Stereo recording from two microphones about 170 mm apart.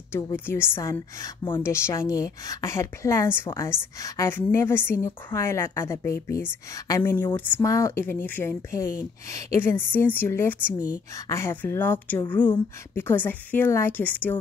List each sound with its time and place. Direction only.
0.1 s speech: 15° left (ahead or behind)